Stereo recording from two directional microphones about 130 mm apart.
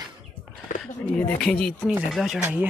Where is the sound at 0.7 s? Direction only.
90° left.